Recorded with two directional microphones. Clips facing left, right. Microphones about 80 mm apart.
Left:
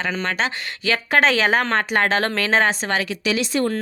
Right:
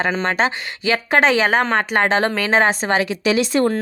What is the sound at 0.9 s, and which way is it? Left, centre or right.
Speech, centre.